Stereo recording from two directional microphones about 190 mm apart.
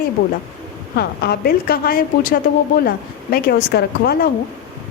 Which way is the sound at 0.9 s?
55° left (ahead or behind).